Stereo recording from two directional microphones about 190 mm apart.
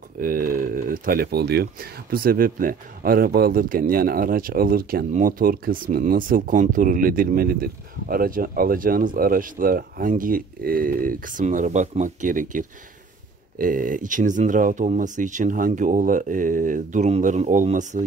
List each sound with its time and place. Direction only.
0.2 s speech: 45° right (ahead or behind)